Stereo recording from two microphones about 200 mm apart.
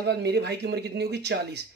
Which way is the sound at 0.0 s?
55° right (ahead or behind).